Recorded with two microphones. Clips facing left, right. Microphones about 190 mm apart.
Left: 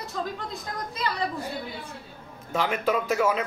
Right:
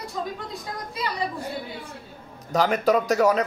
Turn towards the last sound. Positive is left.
turn(degrees=-40)  # may be behind; listen again after turning